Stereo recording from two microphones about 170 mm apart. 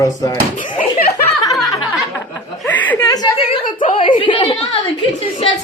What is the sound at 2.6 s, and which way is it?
Chuckle, 10° left (ahead or behind).